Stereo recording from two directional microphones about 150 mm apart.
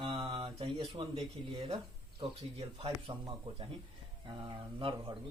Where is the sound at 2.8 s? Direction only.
35° right (ahead or behind).